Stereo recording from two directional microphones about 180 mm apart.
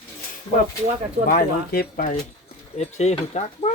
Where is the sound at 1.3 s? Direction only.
55° left (ahead or behind).